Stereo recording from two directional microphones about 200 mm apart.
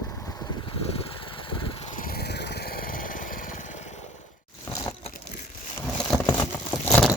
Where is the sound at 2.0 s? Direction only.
50° left (ahead or behind).